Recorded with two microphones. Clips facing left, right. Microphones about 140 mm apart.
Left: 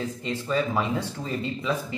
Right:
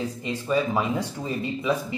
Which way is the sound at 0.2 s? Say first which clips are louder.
Right 2 dB; 15° right (ahead or behind).